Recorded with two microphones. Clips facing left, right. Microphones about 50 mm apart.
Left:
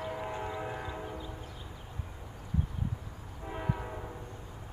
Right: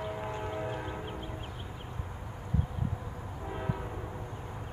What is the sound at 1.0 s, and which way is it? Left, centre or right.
Church bell, right.